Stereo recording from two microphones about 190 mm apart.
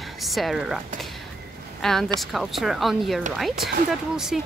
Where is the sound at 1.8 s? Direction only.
Centre (ahead or behind).